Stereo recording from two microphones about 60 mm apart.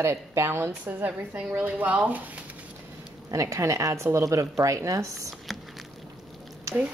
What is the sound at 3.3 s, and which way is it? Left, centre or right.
Speech, right.